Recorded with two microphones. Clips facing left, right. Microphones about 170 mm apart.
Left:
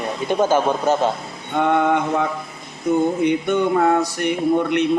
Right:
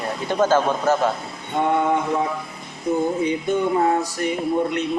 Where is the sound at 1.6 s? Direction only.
75° left (ahead or behind).